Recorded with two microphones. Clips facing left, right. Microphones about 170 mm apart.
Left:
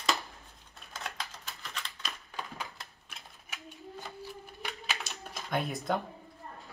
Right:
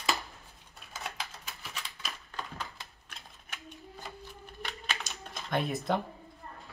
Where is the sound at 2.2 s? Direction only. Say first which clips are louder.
Even; 10° left (ahead or behind).